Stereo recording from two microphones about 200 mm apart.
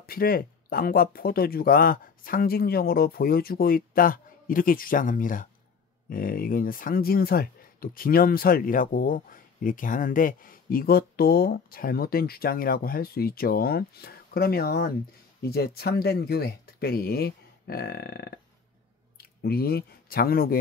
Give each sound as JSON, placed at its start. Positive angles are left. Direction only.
{"t": 0.0, "sound": "speech", "side_deg": 50}